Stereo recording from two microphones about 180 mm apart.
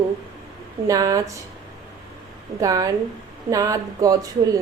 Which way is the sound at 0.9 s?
20° right (ahead or behind).